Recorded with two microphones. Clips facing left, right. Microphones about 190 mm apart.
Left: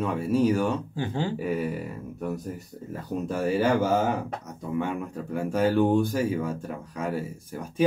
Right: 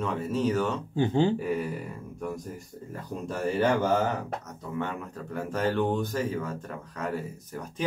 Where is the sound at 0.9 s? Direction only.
20° right (ahead or behind).